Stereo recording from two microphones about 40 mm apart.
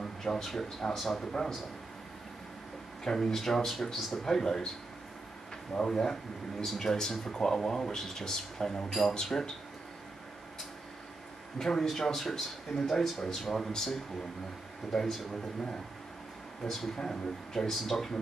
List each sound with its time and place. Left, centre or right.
0.0 s a sound: centre
0.6 s speech: centre
3.0 s speech: centre
5.9 s speech: centre
11.5 s speech: centre
16.7 s speech: centre